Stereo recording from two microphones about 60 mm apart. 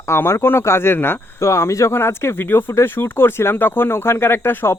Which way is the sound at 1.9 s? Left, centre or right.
Left.